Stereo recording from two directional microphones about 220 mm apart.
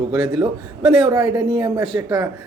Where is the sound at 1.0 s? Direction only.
20° right (ahead or behind).